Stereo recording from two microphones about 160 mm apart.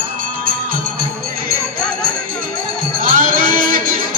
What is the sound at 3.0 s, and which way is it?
Crowd, 60° right (ahead or behind).